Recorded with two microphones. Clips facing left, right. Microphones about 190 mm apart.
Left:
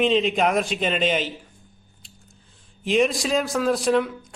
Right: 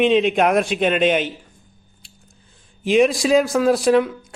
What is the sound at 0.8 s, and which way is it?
Speech, 55° right (ahead or behind).